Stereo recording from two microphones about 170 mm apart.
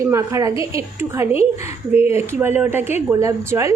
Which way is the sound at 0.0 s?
15° right (ahead or behind).